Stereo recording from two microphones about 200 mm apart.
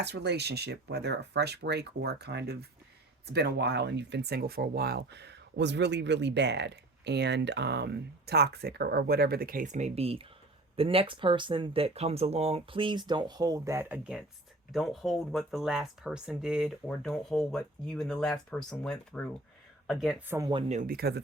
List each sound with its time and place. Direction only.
0.0 s speech: 55° right (ahead or behind); by 20.5 s 10° right (ahead or behind)
20.5 s speech: 30° right (ahead or behind)
20.9 s speech: 55° right (ahead or behind)